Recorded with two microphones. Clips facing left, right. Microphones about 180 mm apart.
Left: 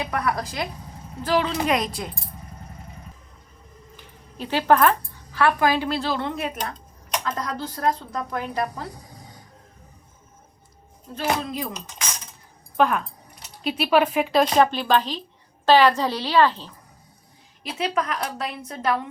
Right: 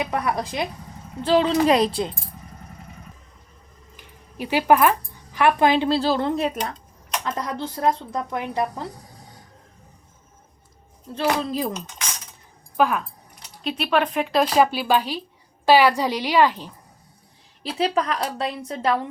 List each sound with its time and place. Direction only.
0.0 s speech: 20° right (ahead or behind)
3.9 s speech: 10° right (ahead or behind); by 6.5 s 35° right (ahead or behind)
7.3 s speech: 20° right (ahead or behind)
11.1 s a woman's voice: 30° right (ahead or behind)
12.7 s a woman's voice: 5° right (ahead or behind)
17.6 s a woman's voice: 30° right (ahead or behind)